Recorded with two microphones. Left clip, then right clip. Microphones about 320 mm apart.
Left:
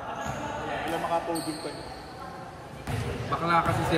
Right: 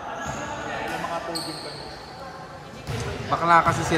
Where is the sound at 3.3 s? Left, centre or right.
Centre.